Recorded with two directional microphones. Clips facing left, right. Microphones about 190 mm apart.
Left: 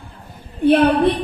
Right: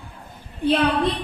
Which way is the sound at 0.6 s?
60° left (ahead or behind).